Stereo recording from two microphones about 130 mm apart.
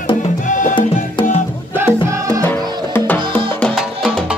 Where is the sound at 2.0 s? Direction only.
25° right (ahead or behind).